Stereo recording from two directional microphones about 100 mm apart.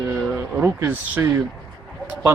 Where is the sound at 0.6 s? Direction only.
25° right (ahead or behind).